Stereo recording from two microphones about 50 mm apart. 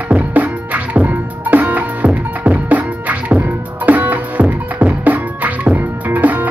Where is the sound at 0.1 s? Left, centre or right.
Right.